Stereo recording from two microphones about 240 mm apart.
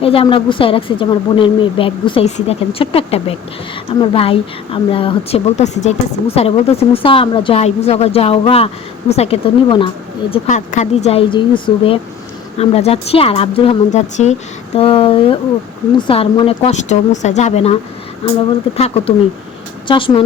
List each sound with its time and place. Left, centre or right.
0.0 s a woman's voice: left
19.9 s a woman's voice: left